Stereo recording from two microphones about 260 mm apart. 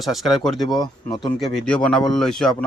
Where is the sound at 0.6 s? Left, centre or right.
Centre.